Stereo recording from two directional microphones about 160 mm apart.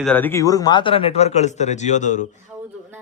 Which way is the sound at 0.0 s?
10° left (ahead or behind).